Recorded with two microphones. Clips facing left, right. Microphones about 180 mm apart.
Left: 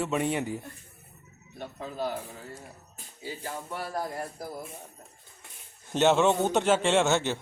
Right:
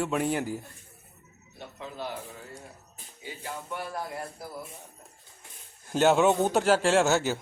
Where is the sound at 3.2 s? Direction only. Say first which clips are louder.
Left 1 dB; 35° left (ahead or behind).